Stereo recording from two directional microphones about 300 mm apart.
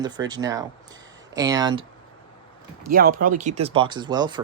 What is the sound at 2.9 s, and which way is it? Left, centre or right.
Speech, right.